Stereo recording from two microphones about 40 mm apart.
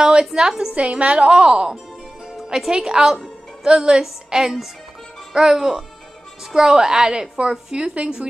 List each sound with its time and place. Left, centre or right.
0.0 s a woman's voice: centre
0.7 s a woman's voice: right
8.0 s speech: right